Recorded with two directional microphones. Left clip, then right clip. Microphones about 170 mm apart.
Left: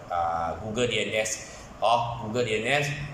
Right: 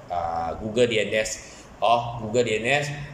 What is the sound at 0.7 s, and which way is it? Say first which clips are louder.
A man's voice: right 5 dB; 25° right (ahead or behind).